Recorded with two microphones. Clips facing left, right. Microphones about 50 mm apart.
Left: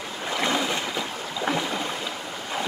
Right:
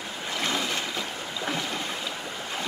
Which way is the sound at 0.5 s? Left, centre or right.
Centre.